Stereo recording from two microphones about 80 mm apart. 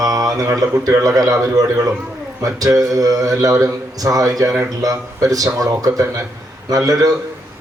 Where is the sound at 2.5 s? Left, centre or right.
Right.